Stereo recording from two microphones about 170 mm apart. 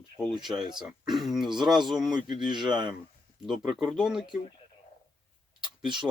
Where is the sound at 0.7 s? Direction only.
Centre (ahead or behind).